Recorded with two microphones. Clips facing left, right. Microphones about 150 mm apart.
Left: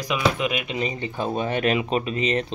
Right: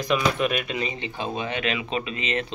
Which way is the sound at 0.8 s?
40° left (ahead or behind).